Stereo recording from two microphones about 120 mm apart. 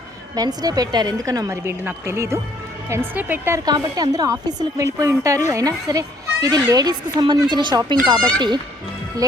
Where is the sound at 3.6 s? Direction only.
35° right (ahead or behind).